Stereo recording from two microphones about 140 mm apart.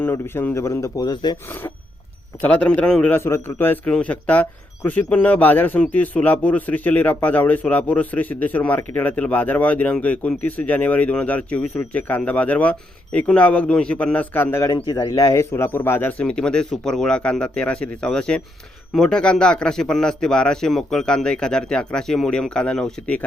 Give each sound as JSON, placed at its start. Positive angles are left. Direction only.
{"t": 0.0, "sound": "speech", "side_deg": 15}
{"t": 2.4, "sound": "a man's voice", "side_deg": 10}
{"t": 3.2, "sound": "a man's voice", "side_deg": 20}
{"t": 14.8, "sound": "a man's voice", "side_deg": 30}